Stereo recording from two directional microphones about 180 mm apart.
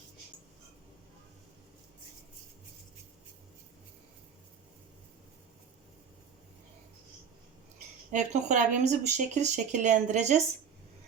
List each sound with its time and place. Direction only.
8.1 s speech: 40° right (ahead or behind)